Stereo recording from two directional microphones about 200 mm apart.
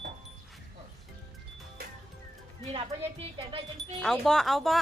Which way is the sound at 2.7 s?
25° right (ahead or behind).